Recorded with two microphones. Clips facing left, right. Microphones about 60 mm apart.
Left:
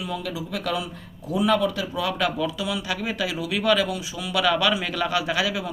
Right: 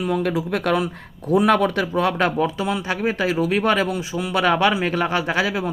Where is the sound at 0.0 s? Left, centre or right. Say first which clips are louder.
Right 8 dB; right.